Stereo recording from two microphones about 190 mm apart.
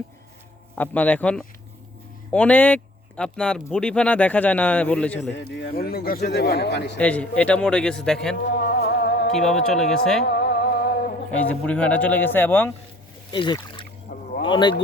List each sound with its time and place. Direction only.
0.8 s speech: 10° left (ahead or behind)
5.3 s speech: 60° left (ahead or behind)
7.0 s speech: 5° left (ahead or behind)
8.4 s music: 60° left (ahead or behind)
9.3 s speech: centre (ahead or behind)
10.2 s music: 60° left (ahead or behind)
11.3 s speech: 5° left (ahead or behind)
13.3 s speech: 25° left (ahead or behind)
14.1 s rowboat: 55° left (ahead or behind)
14.4 s speech: 25° left (ahead or behind)